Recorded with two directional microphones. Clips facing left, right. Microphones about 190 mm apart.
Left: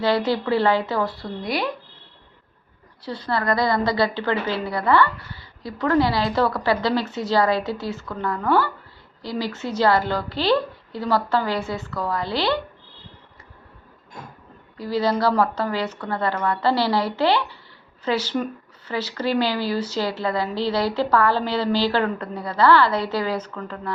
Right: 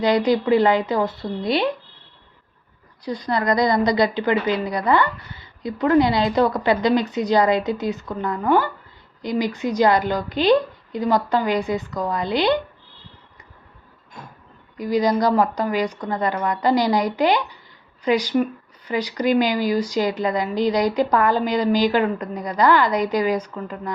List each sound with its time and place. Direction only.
0.0 s a woman's voice: 15° right (ahead or behind)
3.0 s a woman's voice: 15° right (ahead or behind)
14.8 s a woman's voice: 15° right (ahead or behind)